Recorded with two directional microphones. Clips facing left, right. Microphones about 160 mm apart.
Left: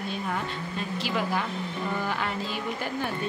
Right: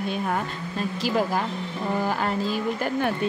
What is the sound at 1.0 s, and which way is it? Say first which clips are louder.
Speech: right 5 dB; 40° right (ahead or behind).